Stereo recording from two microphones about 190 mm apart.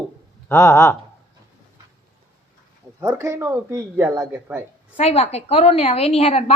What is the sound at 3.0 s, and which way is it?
Speech, 15° right (ahead or behind).